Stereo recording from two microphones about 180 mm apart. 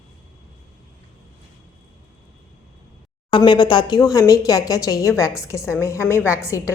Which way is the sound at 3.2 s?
25° left (ahead or behind).